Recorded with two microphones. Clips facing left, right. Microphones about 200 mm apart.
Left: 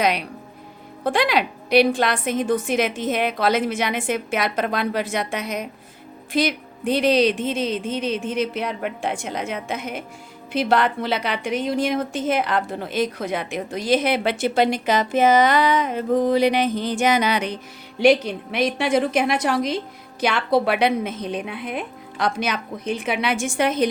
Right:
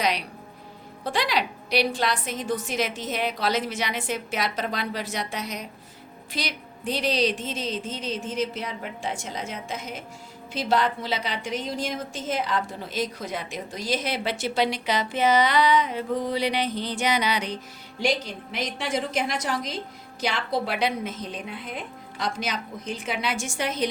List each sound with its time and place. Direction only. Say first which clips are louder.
1.0 s a woman's voice: left 6 dB; 55° left (ahead or behind)
18.0 s a woman's voice: left 10 dB; 60° left (ahead or behind)